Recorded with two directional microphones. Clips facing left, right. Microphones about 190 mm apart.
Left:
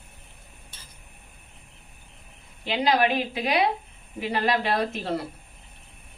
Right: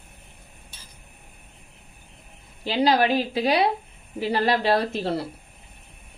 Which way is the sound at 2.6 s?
35° right (ahead or behind).